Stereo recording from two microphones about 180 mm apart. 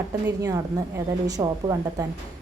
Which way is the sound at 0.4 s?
20° right (ahead or behind).